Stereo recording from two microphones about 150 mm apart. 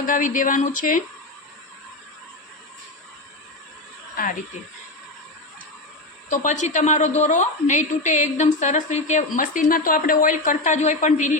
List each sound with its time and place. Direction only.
0.0 s a woman's voice: 60° left (ahead or behind)
6.3 s a woman's voice: 55° left (ahead or behind)